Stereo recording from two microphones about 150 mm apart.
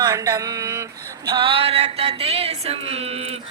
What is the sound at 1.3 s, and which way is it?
Speech, 35° right (ahead or behind).